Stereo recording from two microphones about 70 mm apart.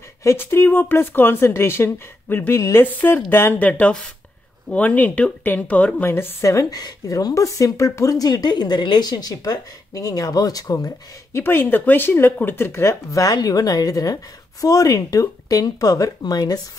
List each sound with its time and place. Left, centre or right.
0.4 s speech: left
3.5 s speech: left
6.4 s speech: left
11.3 s speech: left
13.1 s speech: left